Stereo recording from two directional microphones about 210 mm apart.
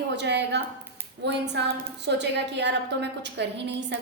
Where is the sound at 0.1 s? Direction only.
55° right (ahead or behind).